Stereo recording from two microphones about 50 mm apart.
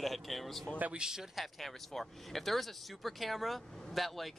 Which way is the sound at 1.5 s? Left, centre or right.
Centre.